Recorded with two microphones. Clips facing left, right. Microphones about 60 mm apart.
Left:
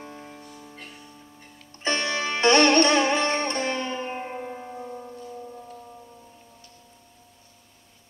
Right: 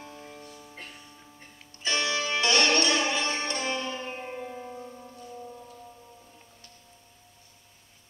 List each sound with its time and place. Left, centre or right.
0.0 s music: left
1.7 s sitar: left
5.2 s music: centre